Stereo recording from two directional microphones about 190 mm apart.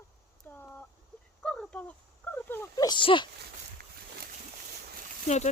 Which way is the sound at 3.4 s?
55° right (ahead or behind).